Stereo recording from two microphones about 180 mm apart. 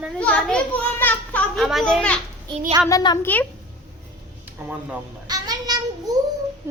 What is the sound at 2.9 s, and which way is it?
Speech, 25° left (ahead or behind).